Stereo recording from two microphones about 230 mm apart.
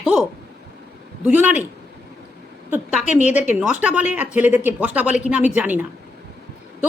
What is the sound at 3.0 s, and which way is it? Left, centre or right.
Speech, left.